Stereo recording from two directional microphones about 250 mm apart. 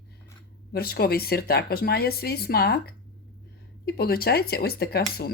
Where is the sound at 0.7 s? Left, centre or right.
Left.